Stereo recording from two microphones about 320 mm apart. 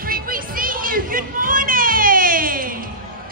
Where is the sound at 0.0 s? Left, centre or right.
Right.